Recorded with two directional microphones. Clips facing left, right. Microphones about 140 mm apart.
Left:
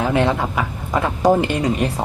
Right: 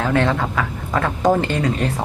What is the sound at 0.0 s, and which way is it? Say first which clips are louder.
Speech: left 1 dB; 15° left (ahead or behind).